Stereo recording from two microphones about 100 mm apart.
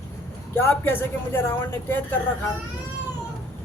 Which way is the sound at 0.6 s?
20° left (ahead or behind).